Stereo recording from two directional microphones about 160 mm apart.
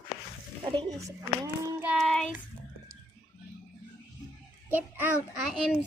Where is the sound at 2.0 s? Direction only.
5° left (ahead or behind).